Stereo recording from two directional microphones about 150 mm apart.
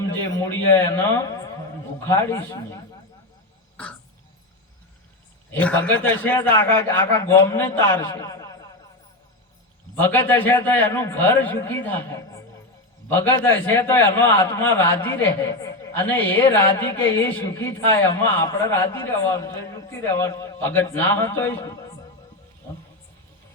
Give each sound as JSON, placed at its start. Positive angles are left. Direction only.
{"t": 0.3, "sound": "a man's voice", "side_deg": 15}
{"t": 5.5, "sound": "a man's voice", "side_deg": 10}
{"t": 10.0, "sound": "a man's voice", "side_deg": 10}